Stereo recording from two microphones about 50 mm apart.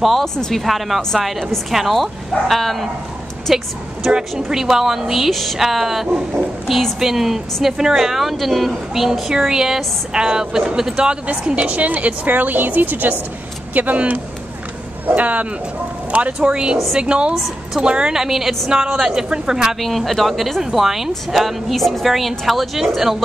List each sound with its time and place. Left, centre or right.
0.2 s a woman's voice: centre
18.7 s a woman's voice: centre
19.8 s a woman's voice: centre